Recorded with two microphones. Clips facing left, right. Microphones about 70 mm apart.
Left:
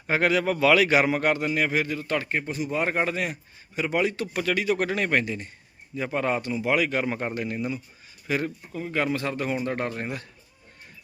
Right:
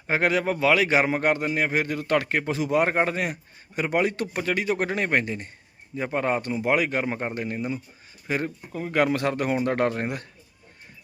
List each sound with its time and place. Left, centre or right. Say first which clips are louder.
0.1 s speech: even; right
0.5 s speech: left 2 dB; centre
1.7 s speech: right 1 dB; right
2.0 s speech: right 4 dB; right
2.8 s speech: right 2 dB; right
4.4 s speech: left 2 dB; right
6.4 s speech: right 1 dB; right
7.0 s speech: even; right
8.3 s speech: even; right